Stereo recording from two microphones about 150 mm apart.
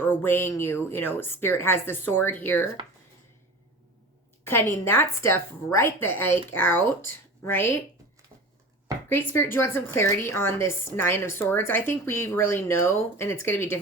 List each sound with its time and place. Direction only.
0.0 s a woman's voice: 15° left (ahead or behind)
4.4 s a woman's voice: 15° left (ahead or behind)
9.0 s a woman's voice: 15° left (ahead or behind)